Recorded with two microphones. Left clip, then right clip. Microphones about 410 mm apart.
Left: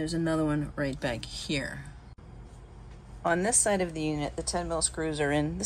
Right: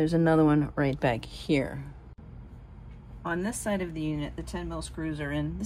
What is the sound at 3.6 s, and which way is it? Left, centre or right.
Speech, left.